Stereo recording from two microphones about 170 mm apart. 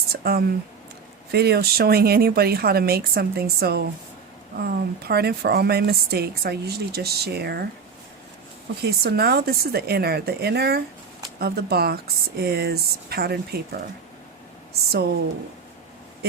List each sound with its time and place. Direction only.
0.1 s a sound: 65° right (ahead or behind)
1.3 s speech: 70° right (ahead or behind)
8.8 s speech: 70° right (ahead or behind)